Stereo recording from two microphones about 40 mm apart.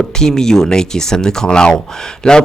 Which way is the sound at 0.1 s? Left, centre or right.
Centre.